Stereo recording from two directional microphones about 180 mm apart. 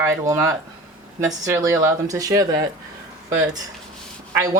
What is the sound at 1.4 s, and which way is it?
Speech, 15° right (ahead or behind).